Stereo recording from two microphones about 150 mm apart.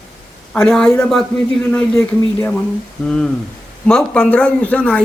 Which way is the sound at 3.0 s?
5° left (ahead or behind).